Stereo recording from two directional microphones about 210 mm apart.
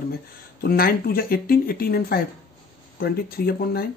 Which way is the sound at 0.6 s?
45° left (ahead or behind).